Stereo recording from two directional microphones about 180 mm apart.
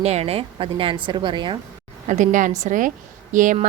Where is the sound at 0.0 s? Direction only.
35° right (ahead or behind).